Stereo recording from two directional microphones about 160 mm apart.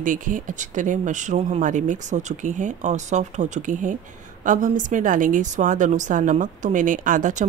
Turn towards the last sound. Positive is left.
turn(degrees=-55)  # may be behind; listen again after turning